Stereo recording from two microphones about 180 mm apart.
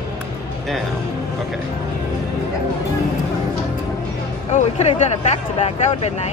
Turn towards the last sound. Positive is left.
turn(degrees=35)  # may be behind; listen again after turning